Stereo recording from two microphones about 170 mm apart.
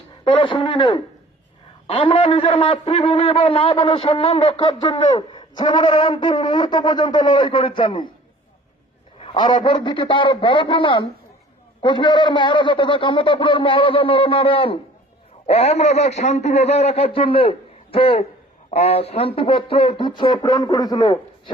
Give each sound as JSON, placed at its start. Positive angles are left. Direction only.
{"t": 0.3, "sound": "a man's voice", "side_deg": 30}
{"t": 4.6, "sound": "speech", "side_deg": 25}
{"t": 9.1, "sound": "a man's voice", "side_deg": 30}